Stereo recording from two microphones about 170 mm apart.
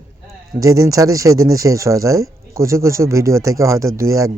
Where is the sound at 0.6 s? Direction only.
20° right (ahead or behind).